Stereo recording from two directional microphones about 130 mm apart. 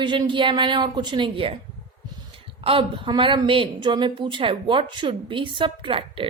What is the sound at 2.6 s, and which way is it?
A woman's voice, 45° right (ahead or behind).